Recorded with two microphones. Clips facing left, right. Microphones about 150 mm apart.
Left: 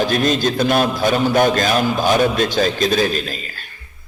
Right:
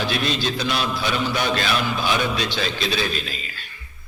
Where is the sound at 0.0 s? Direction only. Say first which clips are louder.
Left 7 dB; 45° left (ahead or behind).